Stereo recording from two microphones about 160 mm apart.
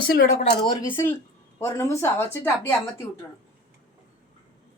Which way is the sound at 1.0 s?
20° left (ahead or behind).